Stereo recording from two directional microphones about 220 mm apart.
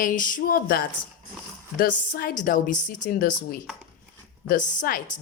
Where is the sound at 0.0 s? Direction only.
40° left (ahead or behind).